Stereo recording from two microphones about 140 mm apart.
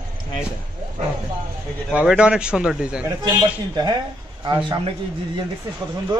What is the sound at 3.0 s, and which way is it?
A man's voice, 30° right (ahead or behind).